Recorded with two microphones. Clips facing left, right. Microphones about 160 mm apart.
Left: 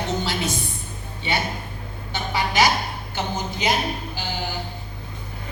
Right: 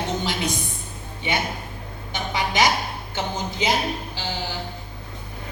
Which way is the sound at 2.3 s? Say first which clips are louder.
Left 1 dB; 20° right (ahead or behind).